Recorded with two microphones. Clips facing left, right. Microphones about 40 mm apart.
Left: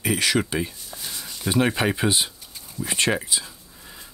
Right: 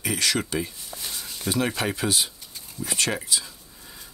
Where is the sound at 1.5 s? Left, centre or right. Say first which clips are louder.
Left 4 dB; left.